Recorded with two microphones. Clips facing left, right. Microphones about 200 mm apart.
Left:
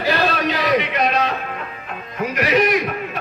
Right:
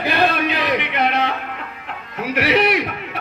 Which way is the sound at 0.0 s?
55° right (ahead or behind).